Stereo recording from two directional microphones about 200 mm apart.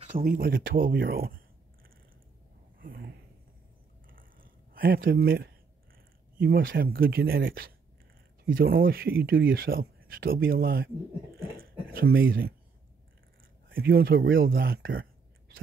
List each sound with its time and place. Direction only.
0.2 s speech: 50° right (ahead or behind)
2.8 s speech: 45° right (ahead or behind)
4.1 s a sound: 45° right (ahead or behind)
5.0 s speech: 50° right (ahead or behind)
11.3 s a sound: 50° right (ahead or behind)
13.7 s speech: 50° right (ahead or behind)